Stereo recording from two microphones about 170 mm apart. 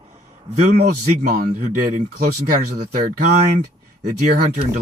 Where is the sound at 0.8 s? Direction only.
60° right (ahead or behind).